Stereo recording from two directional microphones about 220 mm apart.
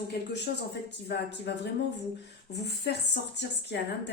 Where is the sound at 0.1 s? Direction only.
50° left (ahead or behind).